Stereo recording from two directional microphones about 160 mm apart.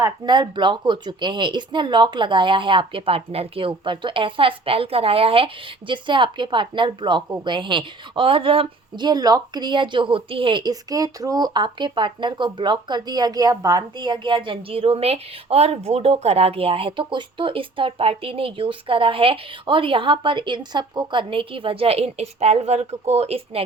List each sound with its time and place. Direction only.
0.0 s a woman's voice: 30° right (ahead or behind)